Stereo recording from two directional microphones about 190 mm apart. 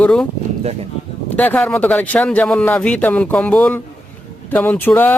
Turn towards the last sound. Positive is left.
turn(degrees=10)  # may be behind; listen again after turning